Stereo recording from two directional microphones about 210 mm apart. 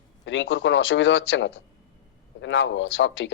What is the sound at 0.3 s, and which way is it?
Speech, 65° left (ahead or behind).